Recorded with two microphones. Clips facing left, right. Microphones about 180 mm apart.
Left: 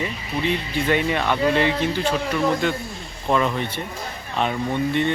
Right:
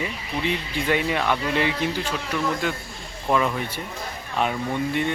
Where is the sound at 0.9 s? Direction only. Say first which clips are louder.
Left 1 dB; 5° right (ahead or behind).